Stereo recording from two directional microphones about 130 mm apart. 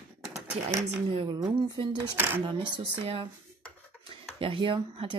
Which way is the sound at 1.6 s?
30° right (ahead or behind).